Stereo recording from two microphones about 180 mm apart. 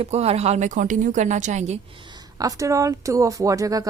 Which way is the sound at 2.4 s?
20° right (ahead or behind).